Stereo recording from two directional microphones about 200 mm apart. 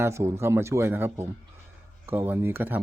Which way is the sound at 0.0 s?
15° right (ahead or behind).